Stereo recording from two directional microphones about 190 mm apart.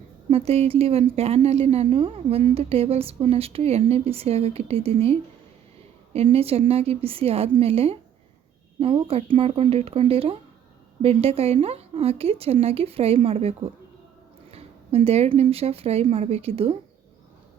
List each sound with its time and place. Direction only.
0.3 s a woman's voice: 30° right (ahead or behind)
6.1 s a woman's voice: 30° right (ahead or behind)